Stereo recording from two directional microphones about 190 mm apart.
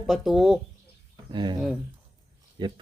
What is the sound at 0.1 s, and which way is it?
Speech, centre (ahead or behind).